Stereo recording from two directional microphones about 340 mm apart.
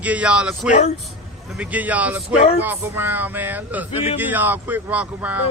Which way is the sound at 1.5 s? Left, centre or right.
Centre.